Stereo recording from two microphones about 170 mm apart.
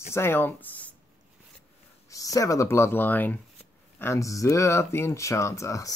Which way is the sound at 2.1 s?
20° left (ahead or behind).